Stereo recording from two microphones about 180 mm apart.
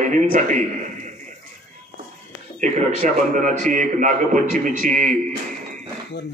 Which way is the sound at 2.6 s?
45° right (ahead or behind).